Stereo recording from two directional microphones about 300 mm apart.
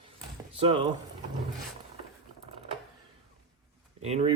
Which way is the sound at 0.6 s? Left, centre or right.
Centre.